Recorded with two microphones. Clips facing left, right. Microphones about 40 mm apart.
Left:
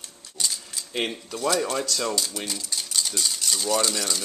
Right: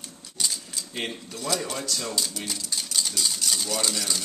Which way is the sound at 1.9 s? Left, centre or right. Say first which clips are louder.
Left 4 dB; left.